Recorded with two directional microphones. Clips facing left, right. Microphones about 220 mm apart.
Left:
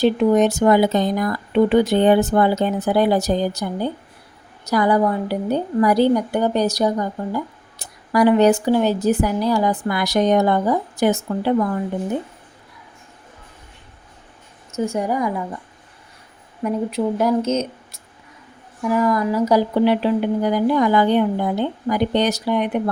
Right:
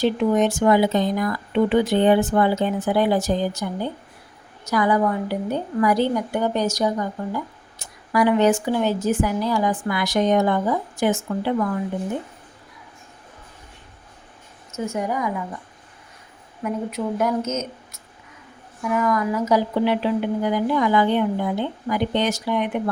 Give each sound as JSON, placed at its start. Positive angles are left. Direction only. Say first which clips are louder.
{"t": 0.0, "sound": "a woman's voice", "louder": "left 4 dB", "side_deg": 40}
{"t": 14.8, "sound": "a woman's voice", "louder": "left 3 dB", "side_deg": 35}
{"t": 16.6, "sound": "a woman's voice", "louder": "left 4 dB", "side_deg": 35}